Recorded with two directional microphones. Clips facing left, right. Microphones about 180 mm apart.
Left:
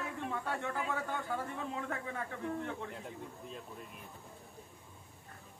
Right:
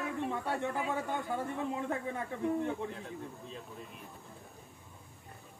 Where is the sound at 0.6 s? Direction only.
15° right (ahead or behind).